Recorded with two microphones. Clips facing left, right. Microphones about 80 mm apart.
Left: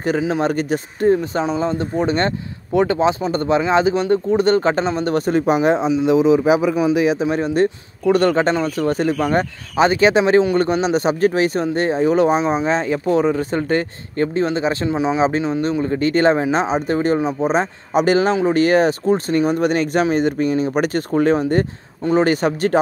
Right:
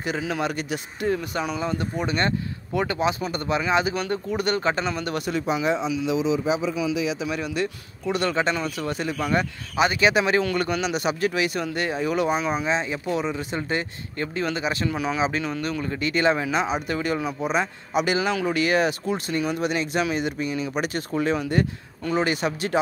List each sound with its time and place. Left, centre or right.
0.2 s speech: left
0.5 s speech: left
6.8 s speech: left
7.2 s speech: left
12.6 s speech: left
15.8 s speech: left
18.3 s speech: left
18.6 s speech: left